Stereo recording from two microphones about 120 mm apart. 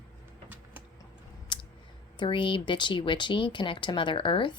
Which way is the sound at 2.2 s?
45° left (ahead or behind).